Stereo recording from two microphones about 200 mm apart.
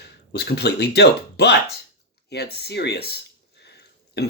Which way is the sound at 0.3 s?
55° left (ahead or behind).